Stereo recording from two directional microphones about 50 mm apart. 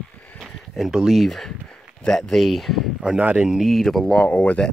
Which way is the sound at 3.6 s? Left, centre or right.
Centre.